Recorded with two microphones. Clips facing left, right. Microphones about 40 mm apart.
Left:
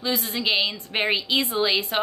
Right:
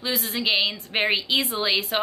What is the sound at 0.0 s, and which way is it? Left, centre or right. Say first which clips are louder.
A woman's voice: left 1 dB; centre.